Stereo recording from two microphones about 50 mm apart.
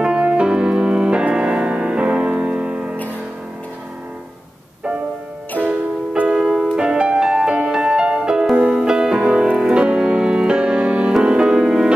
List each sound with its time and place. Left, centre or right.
0.0 s music: centre
5.7 s music: right